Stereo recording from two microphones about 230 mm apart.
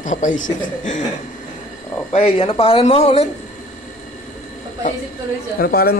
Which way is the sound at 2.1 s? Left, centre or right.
Left.